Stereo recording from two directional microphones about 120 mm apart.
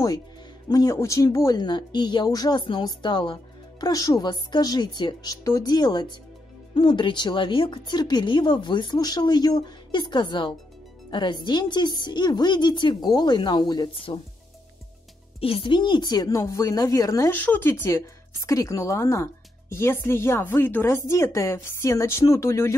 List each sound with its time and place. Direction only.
0.7 s speech: 30° left (ahead or behind)
3.8 s speech: 30° left (ahead or behind)
15.4 s speech: 50° left (ahead or behind); by 17.3 s 30° left (ahead or behind)
17.3 s speech: 15° left (ahead or behind)